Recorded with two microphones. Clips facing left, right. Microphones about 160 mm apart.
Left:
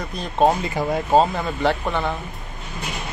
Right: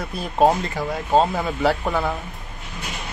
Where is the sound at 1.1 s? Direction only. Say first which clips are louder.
Even; centre (ahead or behind).